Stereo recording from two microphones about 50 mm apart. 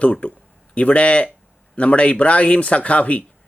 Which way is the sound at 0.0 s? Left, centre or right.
Left.